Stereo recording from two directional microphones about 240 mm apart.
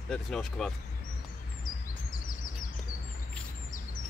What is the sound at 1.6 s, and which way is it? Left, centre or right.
Bird, left.